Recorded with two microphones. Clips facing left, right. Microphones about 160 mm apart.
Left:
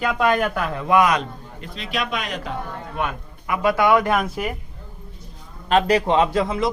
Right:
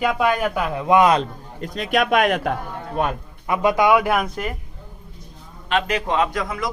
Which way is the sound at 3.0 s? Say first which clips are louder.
Right 4 dB; 35° right (ahead or behind).